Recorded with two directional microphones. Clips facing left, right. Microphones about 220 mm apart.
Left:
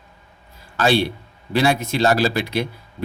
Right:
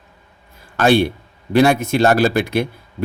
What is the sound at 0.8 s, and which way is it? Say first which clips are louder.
Speech: right 4 dB; 50° right (ahead or behind).